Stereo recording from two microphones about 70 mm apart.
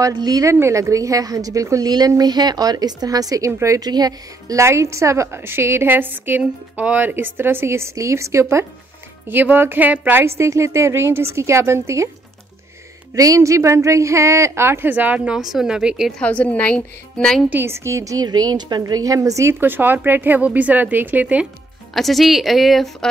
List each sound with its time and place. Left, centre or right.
0.0 s a woman's voice: right
0.5 s a woman's voice: right
3.8 s speech: right
4.6 s a woman's voice: right
9.3 s speech: right
10.2 s a woman's voice: right
13.1 s a woman's voice: right
15.3 s speech: centre
16.2 s a woman's voice: left
17.5 s a woman's voice: right
18.2 s a woman's voice: right
19.6 s speech: right
21.9 s a woman's voice: centre